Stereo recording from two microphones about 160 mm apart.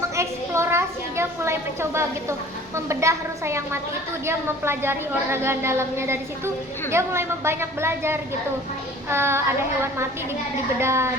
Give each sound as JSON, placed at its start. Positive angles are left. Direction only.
{"t": 0.2, "sound": "a child's voice", "side_deg": -15}